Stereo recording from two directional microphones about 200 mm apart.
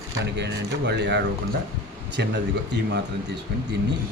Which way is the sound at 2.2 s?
55° right (ahead or behind).